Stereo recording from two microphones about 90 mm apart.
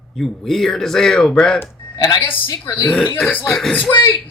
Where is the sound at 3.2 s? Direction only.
20° left (ahead or behind).